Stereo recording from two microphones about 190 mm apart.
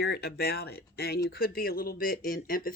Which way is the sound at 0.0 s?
60° left (ahead or behind).